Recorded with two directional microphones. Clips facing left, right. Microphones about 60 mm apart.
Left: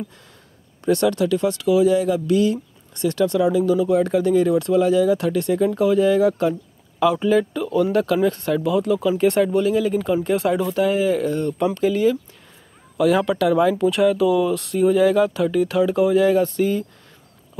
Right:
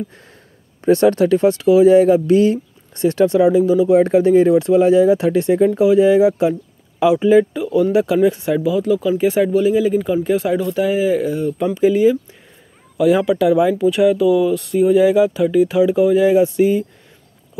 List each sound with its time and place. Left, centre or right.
0.7 s speech: right; by 8.6 s centre
8.6 s speech: centre
11.7 s speech: centre
12.9 s speech: centre